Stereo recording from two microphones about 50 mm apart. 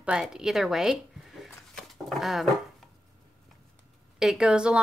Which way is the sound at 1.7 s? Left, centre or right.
Centre.